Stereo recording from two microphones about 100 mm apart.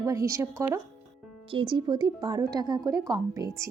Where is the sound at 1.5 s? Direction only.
55° right (ahead or behind); by 3.7 s 30° right (ahead or behind).